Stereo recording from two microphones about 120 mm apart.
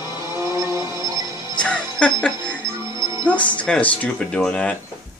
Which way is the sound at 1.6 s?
10° left (ahead or behind).